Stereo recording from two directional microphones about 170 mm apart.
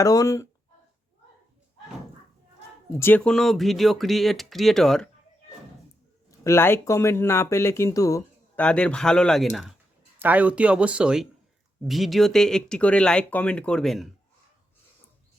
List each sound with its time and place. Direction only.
0.0 s speech: 20° left (ahead or behind)
2.9 s speech: 15° left (ahead or behind)
6.4 s speech: 15° left (ahead or behind)
8.5 s speech: 5° left (ahead or behind)